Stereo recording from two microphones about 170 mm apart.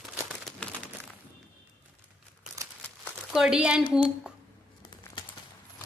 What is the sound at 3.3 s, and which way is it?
A woman's voice, 5° right (ahead or behind).